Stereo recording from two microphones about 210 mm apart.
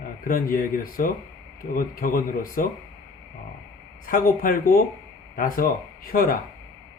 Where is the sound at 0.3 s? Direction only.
40° left (ahead or behind).